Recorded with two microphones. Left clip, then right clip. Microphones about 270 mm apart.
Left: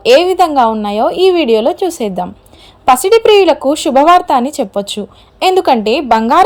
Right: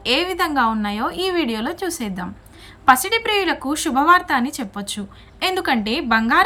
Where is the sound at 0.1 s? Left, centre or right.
Centre.